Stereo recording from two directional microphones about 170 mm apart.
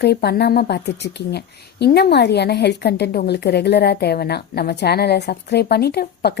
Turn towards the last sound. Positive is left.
turn(degrees=70)  # may be behind; listen again after turning